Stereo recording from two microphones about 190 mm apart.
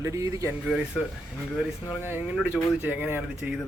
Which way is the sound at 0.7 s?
5° right (ahead or behind).